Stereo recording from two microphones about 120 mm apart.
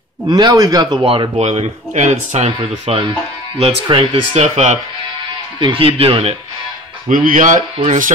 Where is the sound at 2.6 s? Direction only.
45° right (ahead or behind).